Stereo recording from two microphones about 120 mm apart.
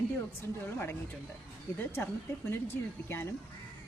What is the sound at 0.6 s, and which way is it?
Speech, 20° left (ahead or behind).